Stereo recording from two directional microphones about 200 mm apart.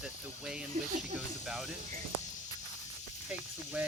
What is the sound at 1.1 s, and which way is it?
Speech, centre (ahead or behind).